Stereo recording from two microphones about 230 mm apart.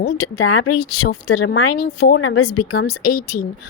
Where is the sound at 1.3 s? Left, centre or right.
Left.